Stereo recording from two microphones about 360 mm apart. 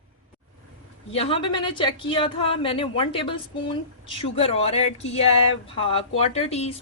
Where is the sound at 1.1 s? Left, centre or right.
Centre.